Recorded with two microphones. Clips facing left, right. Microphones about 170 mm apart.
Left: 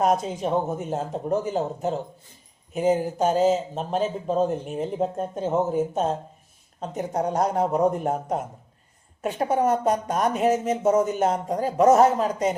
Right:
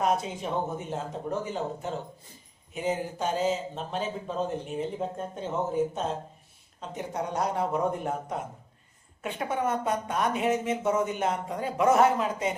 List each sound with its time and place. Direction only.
0.0 s speech: 45° left (ahead or behind)